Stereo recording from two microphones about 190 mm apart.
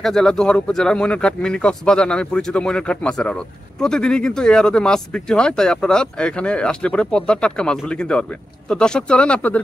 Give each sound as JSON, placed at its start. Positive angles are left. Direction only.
{"t": 0.0, "sound": "speech", "side_deg": 0}